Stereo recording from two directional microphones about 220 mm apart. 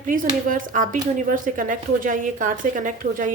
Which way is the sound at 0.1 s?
35° right (ahead or behind).